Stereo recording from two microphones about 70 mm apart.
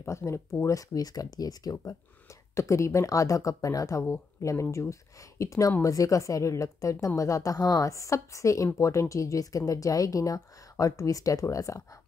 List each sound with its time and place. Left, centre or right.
0.0 s speech: left